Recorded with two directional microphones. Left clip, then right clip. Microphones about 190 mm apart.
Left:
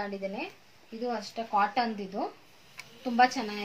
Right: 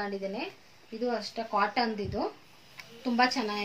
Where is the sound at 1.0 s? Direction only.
20° right (ahead or behind).